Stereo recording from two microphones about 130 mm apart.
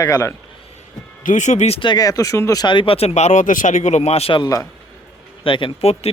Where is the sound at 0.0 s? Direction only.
25° left (ahead or behind).